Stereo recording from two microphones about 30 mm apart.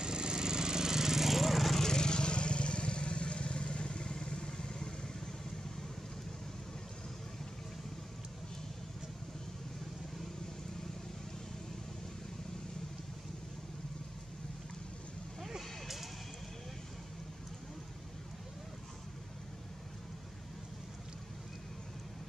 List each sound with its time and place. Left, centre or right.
0.0 s lawn mower: right; by 1.8 s centre
1.8 s vehicle: left
15.4 s vehicle: centre